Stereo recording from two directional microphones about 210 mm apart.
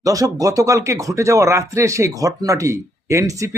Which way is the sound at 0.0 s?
15° right (ahead or behind).